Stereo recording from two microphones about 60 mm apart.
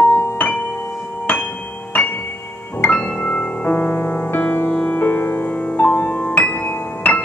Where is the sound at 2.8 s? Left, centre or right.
Left.